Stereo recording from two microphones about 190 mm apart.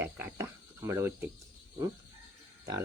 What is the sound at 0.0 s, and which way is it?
Cricket, 15° right (ahead or behind).